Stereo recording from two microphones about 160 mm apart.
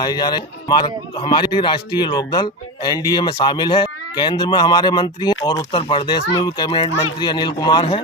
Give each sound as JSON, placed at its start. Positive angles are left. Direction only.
{"t": 0.0, "sound": "speech", "side_deg": 25}